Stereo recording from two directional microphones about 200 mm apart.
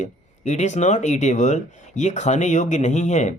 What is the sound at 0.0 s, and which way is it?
Speech, 35° left (ahead or behind).